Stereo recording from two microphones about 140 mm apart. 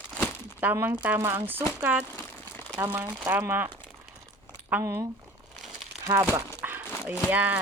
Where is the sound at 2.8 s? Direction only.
15° right (ahead or behind).